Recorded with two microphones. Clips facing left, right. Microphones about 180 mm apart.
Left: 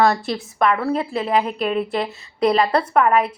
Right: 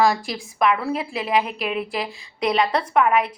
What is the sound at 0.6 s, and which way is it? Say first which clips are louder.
Speech: left 2 dB; 5° right (ahead or behind).